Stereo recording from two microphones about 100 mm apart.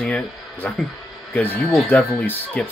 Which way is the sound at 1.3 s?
15° left (ahead or behind).